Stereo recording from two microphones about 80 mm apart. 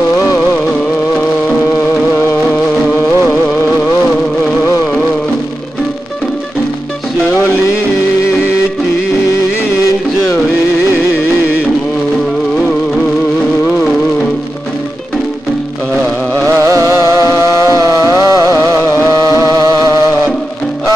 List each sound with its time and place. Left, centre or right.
16.4 s music: right